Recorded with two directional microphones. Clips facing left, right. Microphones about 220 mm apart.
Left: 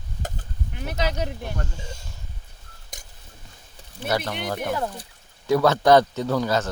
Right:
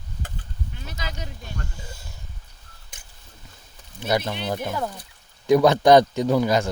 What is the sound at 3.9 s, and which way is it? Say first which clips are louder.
Speech: right 2 dB; 15° right (ahead or behind).